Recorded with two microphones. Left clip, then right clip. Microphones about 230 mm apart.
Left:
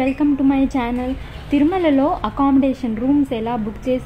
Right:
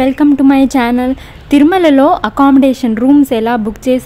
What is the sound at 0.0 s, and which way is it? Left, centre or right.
A woman's voice, right.